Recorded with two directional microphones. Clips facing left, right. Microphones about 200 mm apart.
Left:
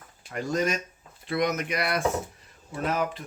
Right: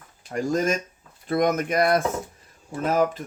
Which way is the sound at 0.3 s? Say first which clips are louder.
Right 4 dB; 45° right (ahead or behind).